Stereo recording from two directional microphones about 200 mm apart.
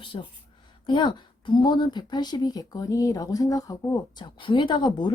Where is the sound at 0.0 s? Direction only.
25° left (ahead or behind).